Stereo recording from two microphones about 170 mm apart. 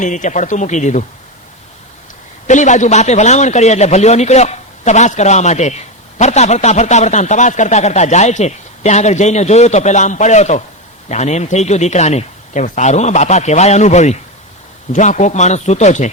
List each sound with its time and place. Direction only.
0.0 s a man's voice: 45° left (ahead or behind)
2.5 s a man's voice: 45° left (ahead or behind)